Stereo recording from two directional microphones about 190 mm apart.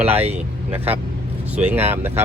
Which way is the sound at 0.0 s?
10° right (ahead or behind).